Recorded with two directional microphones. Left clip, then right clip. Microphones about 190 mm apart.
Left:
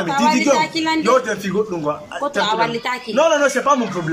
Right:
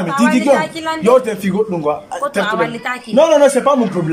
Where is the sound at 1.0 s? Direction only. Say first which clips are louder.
Right 7 dB; 20° right (ahead or behind).